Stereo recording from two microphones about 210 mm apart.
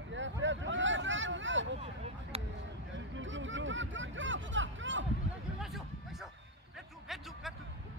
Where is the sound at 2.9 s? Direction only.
65° right (ahead or behind).